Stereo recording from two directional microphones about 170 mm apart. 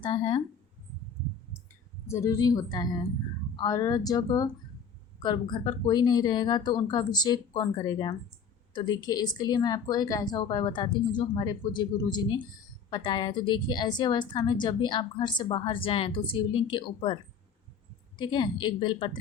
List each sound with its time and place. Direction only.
0.0 s speech: 30° left (ahead or behind)
2.0 s speech: 20° left (ahead or behind)
18.2 s speech: 25° left (ahead or behind)